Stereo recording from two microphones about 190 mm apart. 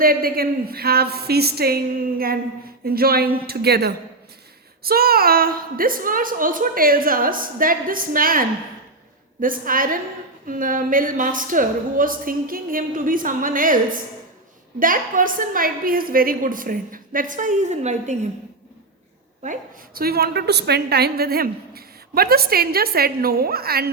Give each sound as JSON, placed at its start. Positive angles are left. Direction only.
{"t": 0.0, "sound": "a woman's voice", "side_deg": -50}
{"t": 19.4, "sound": "a woman's voice", "side_deg": -45}